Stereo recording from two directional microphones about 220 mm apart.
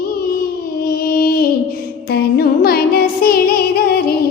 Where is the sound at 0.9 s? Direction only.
45° left (ahead or behind).